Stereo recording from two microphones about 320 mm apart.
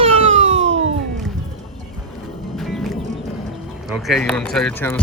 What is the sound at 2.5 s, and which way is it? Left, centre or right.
Music, centre.